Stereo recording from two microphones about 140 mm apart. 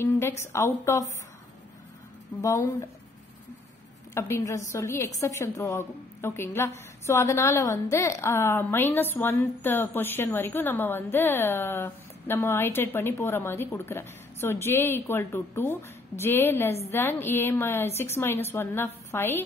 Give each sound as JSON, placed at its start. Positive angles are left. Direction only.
{"t": 0.0, "sound": "a woman's voice", "side_deg": 20}
{"t": 2.4, "sound": "a woman's voice", "side_deg": 25}
{"t": 4.1, "sound": "a woman's voice", "side_deg": 20}